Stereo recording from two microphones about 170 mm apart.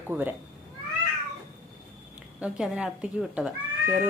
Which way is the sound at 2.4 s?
5° right (ahead or behind).